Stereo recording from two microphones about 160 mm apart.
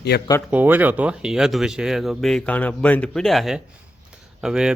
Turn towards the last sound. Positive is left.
turn(degrees=-5)  # may be behind; listen again after turning